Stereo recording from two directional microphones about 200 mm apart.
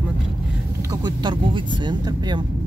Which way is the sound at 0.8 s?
20° right (ahead or behind).